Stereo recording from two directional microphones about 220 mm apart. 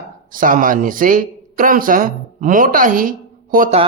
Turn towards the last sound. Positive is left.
turn(degrees=-40)  # may be behind; listen again after turning